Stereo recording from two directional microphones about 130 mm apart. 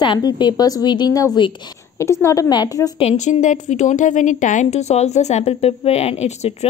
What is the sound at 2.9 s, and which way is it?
A woman's voice, 60° left (ahead or behind).